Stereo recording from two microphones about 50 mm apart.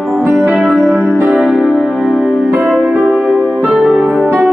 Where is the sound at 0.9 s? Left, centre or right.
Right.